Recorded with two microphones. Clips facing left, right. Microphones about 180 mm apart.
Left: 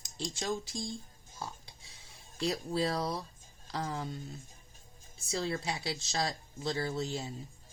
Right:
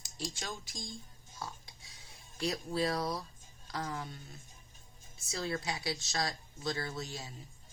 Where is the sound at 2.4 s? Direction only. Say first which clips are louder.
Left 2 dB; 30° left (ahead or behind).